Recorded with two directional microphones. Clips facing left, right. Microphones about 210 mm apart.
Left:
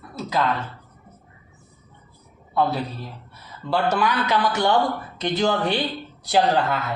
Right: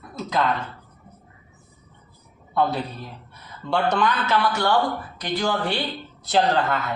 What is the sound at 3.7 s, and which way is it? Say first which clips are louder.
A man's voice: even; 5° left (ahead or behind).